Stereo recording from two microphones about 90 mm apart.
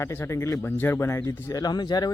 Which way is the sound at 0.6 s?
20° left (ahead or behind).